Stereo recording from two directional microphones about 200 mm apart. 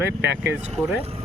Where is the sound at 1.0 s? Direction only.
30° right (ahead or behind).